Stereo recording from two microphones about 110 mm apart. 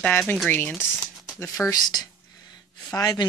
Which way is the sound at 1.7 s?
40° left (ahead or behind).